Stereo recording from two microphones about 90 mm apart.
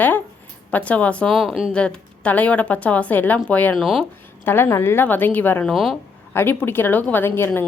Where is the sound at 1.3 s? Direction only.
Centre (ahead or behind).